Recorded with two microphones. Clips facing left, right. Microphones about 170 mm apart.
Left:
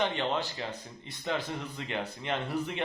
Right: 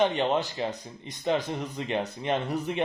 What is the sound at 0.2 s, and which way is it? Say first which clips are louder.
Speech: right 5 dB; 20° right (ahead or behind).